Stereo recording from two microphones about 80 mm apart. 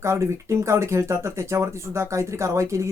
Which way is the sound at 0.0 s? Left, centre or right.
Right.